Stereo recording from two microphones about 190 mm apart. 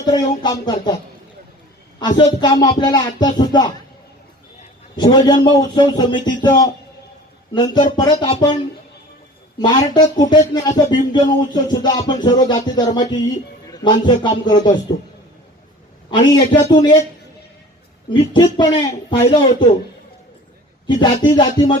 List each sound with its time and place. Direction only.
0.0 s speech: 20° left (ahead or behind)
2.0 s speech: 25° left (ahead or behind)
4.9 s speech: 20° left (ahead or behind)
9.6 s speech: 20° left (ahead or behind)
16.0 s speech: 25° left (ahead or behind)
18.1 s speech: 20° left (ahead or behind)
20.8 s speech: 25° left (ahead or behind)